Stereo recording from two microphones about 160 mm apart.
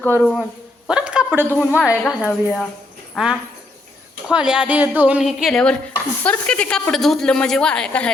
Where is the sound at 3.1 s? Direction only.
5° right (ahead or behind).